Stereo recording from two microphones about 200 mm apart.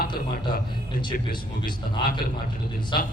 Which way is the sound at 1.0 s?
25° left (ahead or behind).